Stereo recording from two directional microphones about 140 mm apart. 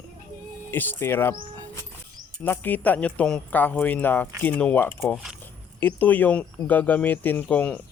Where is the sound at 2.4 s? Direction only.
15° left (ahead or behind).